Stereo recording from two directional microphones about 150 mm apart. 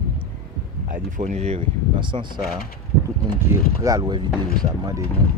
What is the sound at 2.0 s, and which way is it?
Speech, 30° right (ahead or behind).